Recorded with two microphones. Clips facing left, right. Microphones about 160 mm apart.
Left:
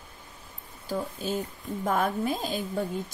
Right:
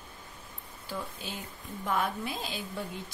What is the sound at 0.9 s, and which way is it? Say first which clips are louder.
A woman's voice: left 8 dB; 45° left (ahead or behind).